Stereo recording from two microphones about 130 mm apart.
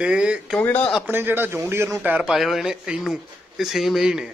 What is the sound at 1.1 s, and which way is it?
A man's voice, 15° right (ahead or behind).